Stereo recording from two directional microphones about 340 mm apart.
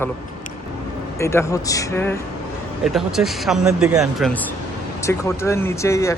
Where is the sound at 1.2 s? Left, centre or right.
Centre.